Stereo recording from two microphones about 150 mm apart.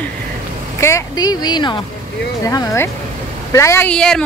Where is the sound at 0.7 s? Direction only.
20° left (ahead or behind).